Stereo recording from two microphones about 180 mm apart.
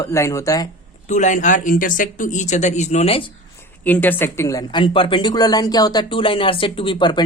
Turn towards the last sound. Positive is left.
turn(degrees=25)  # may be behind; listen again after turning